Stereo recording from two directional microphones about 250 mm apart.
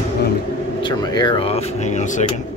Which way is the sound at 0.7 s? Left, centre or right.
Centre.